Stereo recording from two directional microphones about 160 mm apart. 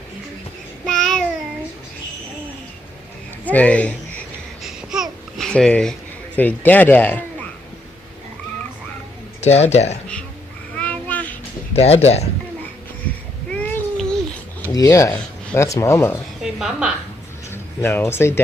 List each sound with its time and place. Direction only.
0.9 s child singing: 5° left (ahead or behind)
3.4 s speech: 10° left (ahead or behind)
4.6 s babbling: centre (ahead or behind)
6.3 s speech: 10° left (ahead or behind)
9.4 s speech: 45° left (ahead or behind)
10.8 s child singing: 10° left (ahead or behind)
11.7 s speech: 40° left (ahead or behind)
13.5 s a sound: 10° left (ahead or behind)
14.7 s speech: 20° left (ahead or behind)
15.1 s a sound: 10° left (ahead or behind)
15.6 s speech: 20° left (ahead or behind)
16.4 s a sound: 5° right (ahead or behind)
17.5 s speech: 15° left (ahead or behind)